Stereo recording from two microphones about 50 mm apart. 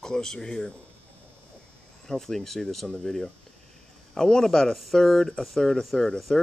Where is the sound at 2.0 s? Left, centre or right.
Centre.